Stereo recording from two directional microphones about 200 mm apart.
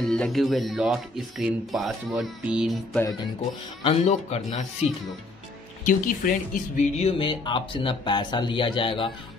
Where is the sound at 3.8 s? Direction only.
30° left (ahead or behind).